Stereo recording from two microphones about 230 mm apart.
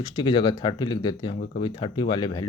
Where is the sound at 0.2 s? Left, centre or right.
Left.